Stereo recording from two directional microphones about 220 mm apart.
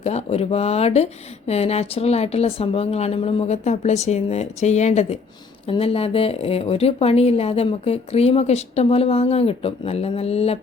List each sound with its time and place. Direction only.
0.0 s speech: 30° left (ahead or behind)